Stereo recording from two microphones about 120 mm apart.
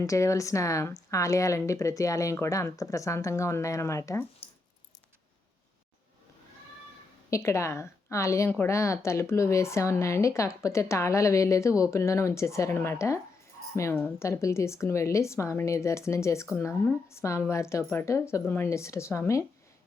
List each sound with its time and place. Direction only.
0.0 s a woman's voice: 25° left (ahead or behind)
7.3 s a woman's voice: 25° left (ahead or behind)